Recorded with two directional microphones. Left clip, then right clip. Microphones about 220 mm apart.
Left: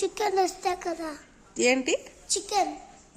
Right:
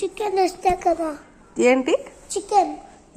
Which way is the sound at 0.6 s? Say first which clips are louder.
Right 10 dB; centre (ahead or behind).